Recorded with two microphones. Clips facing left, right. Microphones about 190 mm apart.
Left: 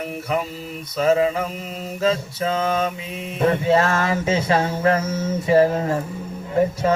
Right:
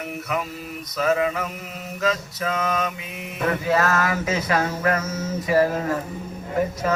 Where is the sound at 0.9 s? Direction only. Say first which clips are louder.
Left 4 dB; 25° left (ahead or behind).